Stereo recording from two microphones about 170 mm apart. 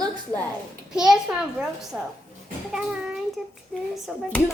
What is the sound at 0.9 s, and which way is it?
A child's voice, 5° right (ahead or behind).